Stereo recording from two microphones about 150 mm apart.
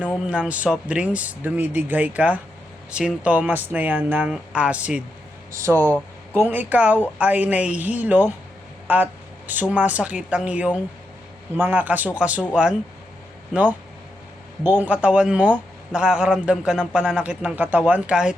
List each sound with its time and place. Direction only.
0.3 s a man's voice: 10° right (ahead or behind)
5.5 s speech: 20° right (ahead or behind)
5.7 s speech: 10° left (ahead or behind)
6.3 s a man's voice: 15° right (ahead or behind)
13.5 s a man's voice: 10° right (ahead or behind)